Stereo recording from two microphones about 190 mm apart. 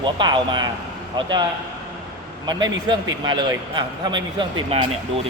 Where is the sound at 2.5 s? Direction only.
20° right (ahead or behind).